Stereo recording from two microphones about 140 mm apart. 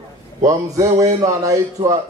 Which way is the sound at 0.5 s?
25° right (ahead or behind).